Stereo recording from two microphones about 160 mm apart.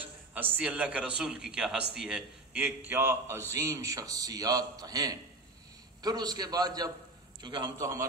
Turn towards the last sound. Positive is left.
turn(degrees=-30)  # may be behind; listen again after turning